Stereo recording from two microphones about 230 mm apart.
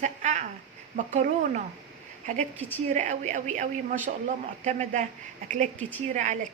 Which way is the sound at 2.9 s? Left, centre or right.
Right.